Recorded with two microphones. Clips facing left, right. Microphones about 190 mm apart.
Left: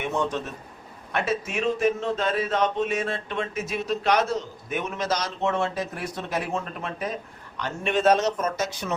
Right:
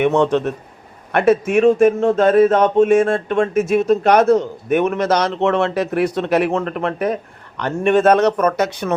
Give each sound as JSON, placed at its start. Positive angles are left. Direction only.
{"t": 0.0, "sound": "speech", "side_deg": -70}
{"t": 1.1, "sound": "a man's voice", "side_deg": -60}